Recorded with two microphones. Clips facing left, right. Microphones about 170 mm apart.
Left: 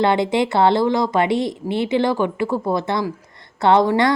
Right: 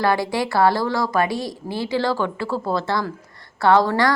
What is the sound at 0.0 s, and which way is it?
A woman's voice, 20° left (ahead or behind).